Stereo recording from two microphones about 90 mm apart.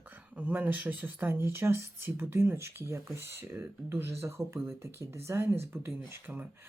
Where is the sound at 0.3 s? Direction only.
20° right (ahead or behind).